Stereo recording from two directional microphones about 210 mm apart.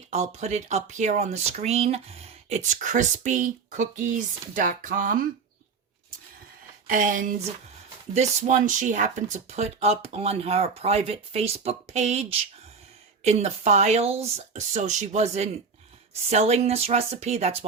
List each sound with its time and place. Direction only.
0.1 s speech: 30° right (ahead or behind)
6.8 s speech: 40° right (ahead or behind)